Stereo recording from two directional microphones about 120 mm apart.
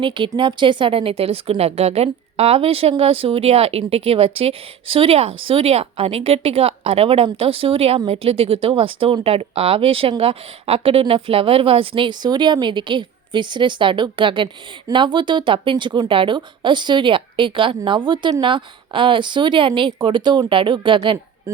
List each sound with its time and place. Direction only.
0.0 s a woman's voice: 45° right (ahead or behind)